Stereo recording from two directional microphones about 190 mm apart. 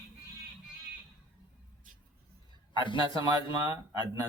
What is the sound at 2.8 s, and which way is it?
Speech, 25° left (ahead or behind).